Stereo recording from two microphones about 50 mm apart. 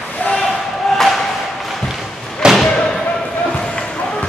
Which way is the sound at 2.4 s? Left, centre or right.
Centre.